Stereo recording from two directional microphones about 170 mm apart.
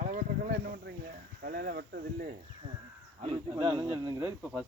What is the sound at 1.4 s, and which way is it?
Speech, 65° right (ahead or behind).